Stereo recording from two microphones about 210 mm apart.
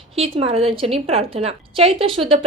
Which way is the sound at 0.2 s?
25° right (ahead or behind).